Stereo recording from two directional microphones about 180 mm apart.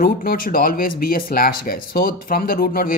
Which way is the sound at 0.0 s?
55° left (ahead or behind).